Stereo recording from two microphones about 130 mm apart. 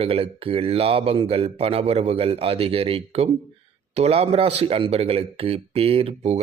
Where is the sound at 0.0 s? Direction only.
45° right (ahead or behind).